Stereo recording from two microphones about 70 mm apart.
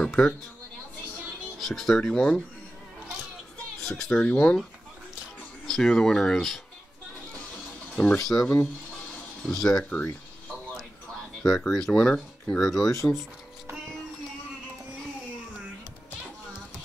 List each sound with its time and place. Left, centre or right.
0.0 s a sound: centre
1.6 s speech: centre
3.8 s speech: centre
5.7 s speech: centre
7.9 s speech: centre
9.8 s speech: centre
11.4 s speech: centre